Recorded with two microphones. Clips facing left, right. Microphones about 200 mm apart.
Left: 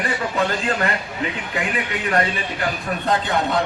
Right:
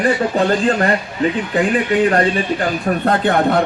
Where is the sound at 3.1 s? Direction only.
55° right (ahead or behind).